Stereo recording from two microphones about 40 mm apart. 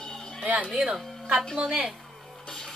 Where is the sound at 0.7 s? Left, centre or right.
Centre.